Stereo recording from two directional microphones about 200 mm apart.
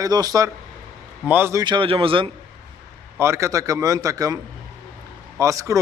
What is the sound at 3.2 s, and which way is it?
A man's voice, 15° right (ahead or behind).